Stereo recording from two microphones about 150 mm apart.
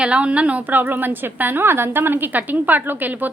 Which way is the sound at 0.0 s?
10° right (ahead or behind).